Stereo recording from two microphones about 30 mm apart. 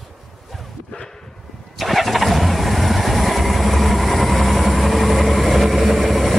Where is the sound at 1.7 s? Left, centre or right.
Centre.